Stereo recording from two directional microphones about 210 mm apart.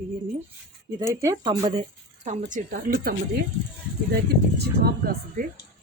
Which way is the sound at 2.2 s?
35° right (ahead or behind).